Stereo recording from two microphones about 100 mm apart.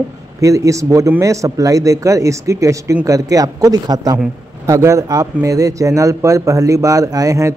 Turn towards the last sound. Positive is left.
turn(degrees=-35)  # may be behind; listen again after turning